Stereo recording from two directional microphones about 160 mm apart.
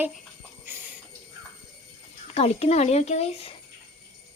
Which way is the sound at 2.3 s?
40° left (ahead or behind).